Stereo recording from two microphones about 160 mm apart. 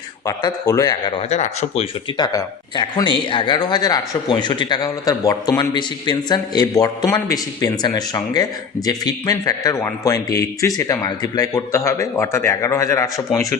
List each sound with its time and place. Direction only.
0.3 s speech: 20° left (ahead or behind)
1.3 s speech: 40° left (ahead or behind)
2.1 s speech: 25° left (ahead or behind)